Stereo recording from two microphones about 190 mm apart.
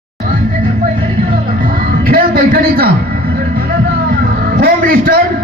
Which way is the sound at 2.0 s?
50° right (ahead or behind).